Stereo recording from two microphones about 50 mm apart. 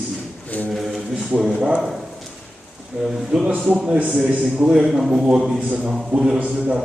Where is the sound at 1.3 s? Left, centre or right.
Right.